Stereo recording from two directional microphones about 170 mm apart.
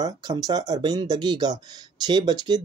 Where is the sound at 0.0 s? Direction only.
25° right (ahead or behind).